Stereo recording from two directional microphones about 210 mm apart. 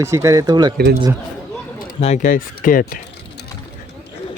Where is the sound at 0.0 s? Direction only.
15° right (ahead or behind).